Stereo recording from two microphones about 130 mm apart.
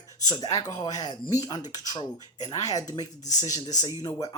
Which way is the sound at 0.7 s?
30° left (ahead or behind).